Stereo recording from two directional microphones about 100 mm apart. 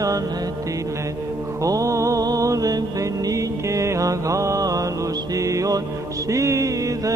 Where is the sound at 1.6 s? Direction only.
35° right (ahead or behind).